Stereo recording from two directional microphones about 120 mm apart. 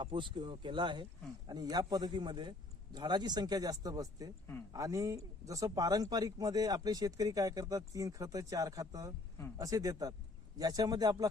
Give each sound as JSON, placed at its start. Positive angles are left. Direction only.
{"t": 0.0, "sound": "a man's voice", "side_deg": -45}